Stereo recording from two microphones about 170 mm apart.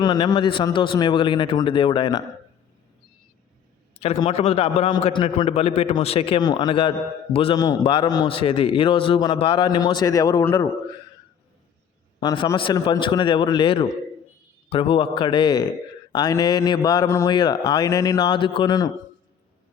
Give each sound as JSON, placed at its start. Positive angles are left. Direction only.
{"t": 0.0, "sound": "a man's voice", "side_deg": 25}
{"t": 4.0, "sound": "a man's voice", "side_deg": 35}
{"t": 12.2, "sound": "a man's voice", "side_deg": 25}